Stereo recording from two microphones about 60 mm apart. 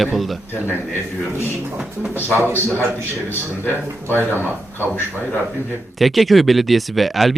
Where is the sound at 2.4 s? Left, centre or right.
Left.